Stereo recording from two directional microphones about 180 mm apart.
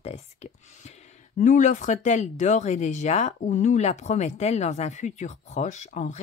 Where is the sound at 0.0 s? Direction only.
35° left (ahead or behind).